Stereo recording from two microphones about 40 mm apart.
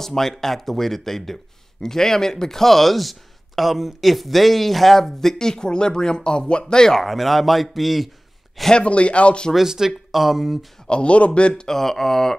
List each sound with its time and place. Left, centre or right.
0.0 s speech: centre
7.0 s speech: centre
8.7 s speech: left
9.7 s speech: centre
10.9 s speech: left
11.6 s speech: centre